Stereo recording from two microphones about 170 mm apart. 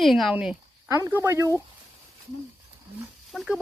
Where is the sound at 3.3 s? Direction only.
Centre (ahead or behind).